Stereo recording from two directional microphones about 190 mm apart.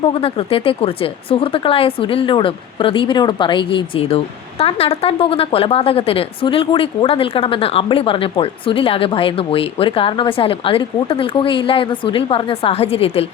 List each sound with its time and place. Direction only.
0.0 s speech: 30° left (ahead or behind)